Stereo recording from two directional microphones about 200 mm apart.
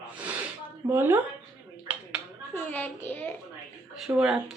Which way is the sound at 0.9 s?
10° right (ahead or behind).